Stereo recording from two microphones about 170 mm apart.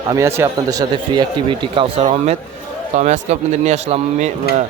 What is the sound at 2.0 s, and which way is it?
Speech, 40° right (ahead or behind).